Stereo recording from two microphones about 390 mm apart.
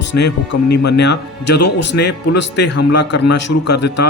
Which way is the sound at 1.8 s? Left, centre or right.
Left.